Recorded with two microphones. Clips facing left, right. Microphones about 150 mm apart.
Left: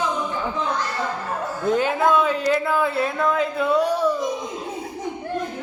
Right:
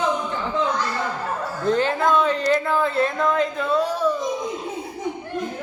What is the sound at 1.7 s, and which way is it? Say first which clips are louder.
A man's voice: even; 5° left (ahead or behind).